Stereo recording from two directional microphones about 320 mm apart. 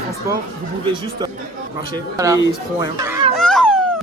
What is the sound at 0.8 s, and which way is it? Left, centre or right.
Speech, centre.